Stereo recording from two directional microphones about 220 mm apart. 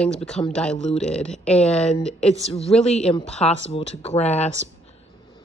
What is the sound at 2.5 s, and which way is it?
Speech, 25° left (ahead or behind).